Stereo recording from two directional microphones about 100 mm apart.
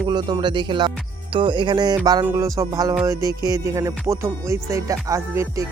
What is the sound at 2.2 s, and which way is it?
Music, 30° right (ahead or behind).